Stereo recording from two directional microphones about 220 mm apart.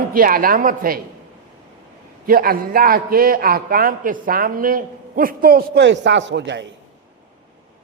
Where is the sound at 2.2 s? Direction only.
40° right (ahead or behind).